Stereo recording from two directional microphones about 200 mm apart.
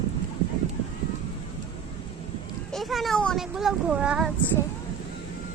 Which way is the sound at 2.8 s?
Centre (ahead or behind).